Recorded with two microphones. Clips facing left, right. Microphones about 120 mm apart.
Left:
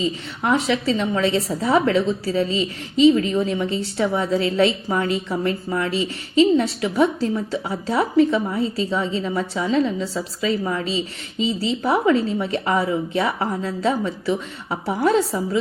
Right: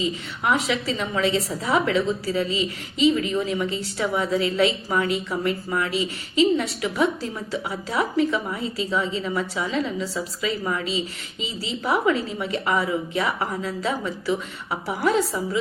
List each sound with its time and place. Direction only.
0.0 s a woman's voice: 35° left (ahead or behind)